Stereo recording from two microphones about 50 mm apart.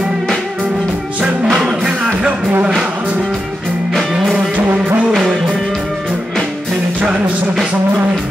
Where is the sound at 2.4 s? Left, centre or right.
Right.